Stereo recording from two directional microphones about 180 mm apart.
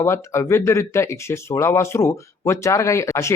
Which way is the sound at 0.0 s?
15° left (ahead or behind).